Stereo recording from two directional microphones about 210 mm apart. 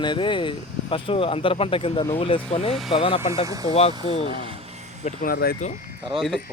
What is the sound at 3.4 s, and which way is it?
Speech, 15° right (ahead or behind).